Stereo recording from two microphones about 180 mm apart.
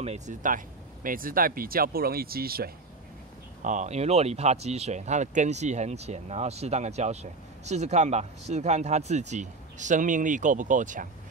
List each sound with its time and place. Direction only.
0.0 s speech: 40° right (ahead or behind); by 2.7 s 55° right (ahead or behind)
3.6 s speech: 40° right (ahead or behind)